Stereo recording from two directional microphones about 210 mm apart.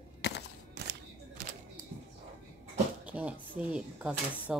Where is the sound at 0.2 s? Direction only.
50° left (ahead or behind).